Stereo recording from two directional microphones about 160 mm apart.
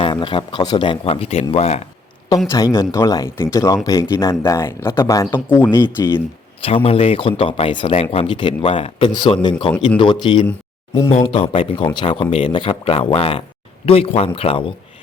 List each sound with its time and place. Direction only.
0.0 s speech: 30° left (ahead or behind)
2.5 s speech: 20° left (ahead or behind)
6.1 s speech: 35° left (ahead or behind)